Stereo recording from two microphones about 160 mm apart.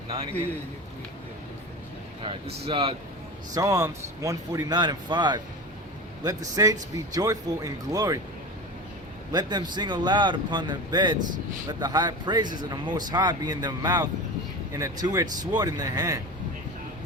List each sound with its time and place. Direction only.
2.2 s speech: 35° right (ahead or behind)
3.5 s speech: 20° right (ahead or behind)
9.3 s speech: 25° right (ahead or behind)